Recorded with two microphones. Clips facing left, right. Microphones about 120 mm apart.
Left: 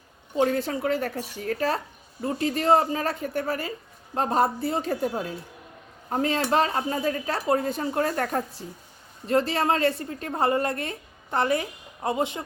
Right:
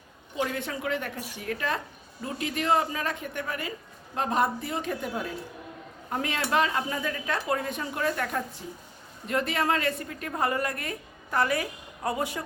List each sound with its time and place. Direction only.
0.4 s a woman's voice: 35° left (ahead or behind)